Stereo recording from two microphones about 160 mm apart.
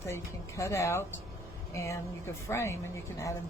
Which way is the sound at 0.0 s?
20° left (ahead or behind).